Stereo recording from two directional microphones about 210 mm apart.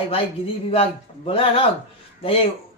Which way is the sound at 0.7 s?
25° left (ahead or behind).